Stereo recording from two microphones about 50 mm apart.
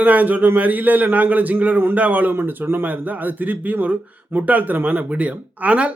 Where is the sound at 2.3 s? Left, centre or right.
Right.